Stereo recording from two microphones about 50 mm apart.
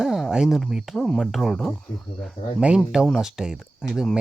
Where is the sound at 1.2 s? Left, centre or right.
Centre.